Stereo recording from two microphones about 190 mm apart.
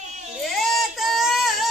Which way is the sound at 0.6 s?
Centre (ahead or behind).